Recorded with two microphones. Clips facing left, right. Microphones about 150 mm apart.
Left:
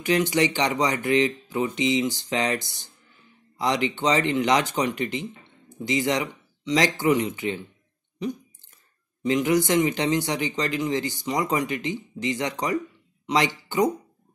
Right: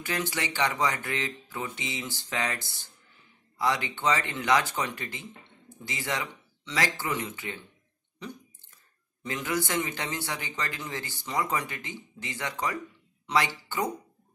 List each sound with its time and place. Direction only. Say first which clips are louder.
0.0 s speech: left 10 dB; 15° left (ahead or behind)
9.2 s speech: left 10 dB; 15° left (ahead or behind)